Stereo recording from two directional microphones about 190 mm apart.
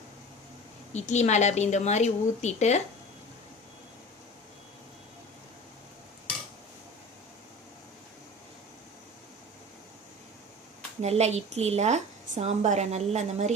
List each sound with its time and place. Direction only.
0.9 s a woman's voice: 35° left (ahead or behind)
11.0 s a woman's voice: 35° right (ahead or behind)